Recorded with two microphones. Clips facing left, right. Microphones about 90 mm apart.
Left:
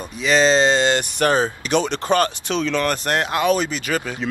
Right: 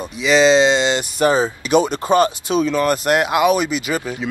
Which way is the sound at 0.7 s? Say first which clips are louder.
Even; 45° left (ahead or behind).